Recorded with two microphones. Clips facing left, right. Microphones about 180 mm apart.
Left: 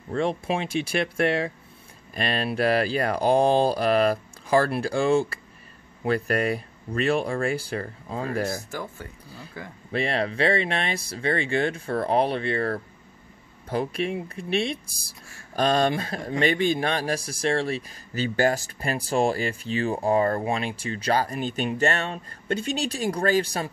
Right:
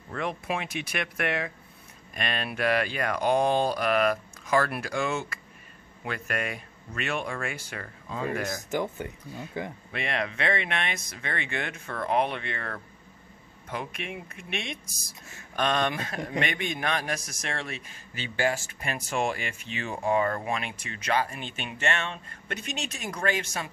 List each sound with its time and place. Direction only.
0.1 s speech: 30° left (ahead or behind)
8.6 s speech: 20° right (ahead or behind)
9.2 s speech: 30° left (ahead or behind)